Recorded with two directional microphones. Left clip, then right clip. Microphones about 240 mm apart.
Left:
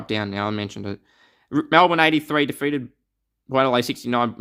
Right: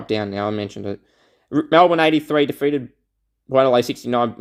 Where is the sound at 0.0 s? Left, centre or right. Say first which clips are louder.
Right 3 dB; centre.